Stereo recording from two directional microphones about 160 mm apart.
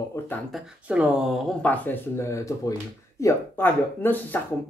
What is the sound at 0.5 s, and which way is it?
Speech, 5° right (ahead or behind).